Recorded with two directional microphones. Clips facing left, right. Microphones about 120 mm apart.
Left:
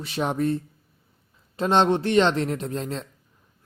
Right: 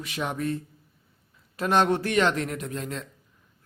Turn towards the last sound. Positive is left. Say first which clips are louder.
# left 3 dB
turn(degrees=30)  # may be behind; listen again after turning